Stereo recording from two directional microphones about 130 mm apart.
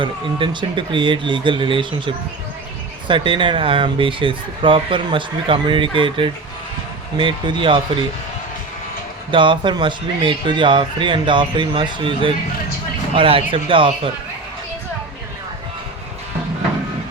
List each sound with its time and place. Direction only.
0.0 s speech: 40° right (ahead or behind)
9.3 s speech: 40° right (ahead or behind)